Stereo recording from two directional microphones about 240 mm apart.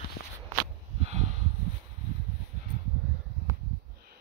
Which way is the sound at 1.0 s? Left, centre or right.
Right.